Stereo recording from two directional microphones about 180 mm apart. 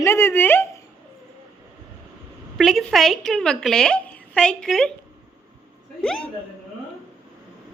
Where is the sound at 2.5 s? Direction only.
Centre (ahead or behind).